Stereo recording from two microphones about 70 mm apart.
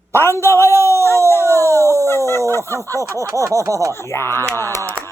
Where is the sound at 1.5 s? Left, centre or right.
Right.